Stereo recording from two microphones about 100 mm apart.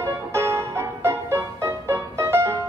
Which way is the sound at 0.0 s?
30° right (ahead or behind).